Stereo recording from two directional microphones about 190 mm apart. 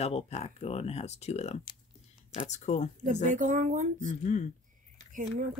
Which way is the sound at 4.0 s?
40° left (ahead or behind).